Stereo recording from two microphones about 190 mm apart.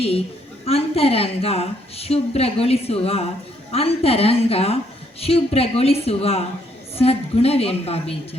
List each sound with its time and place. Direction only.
0.6 s a woman's voice: 30° left (ahead or behind)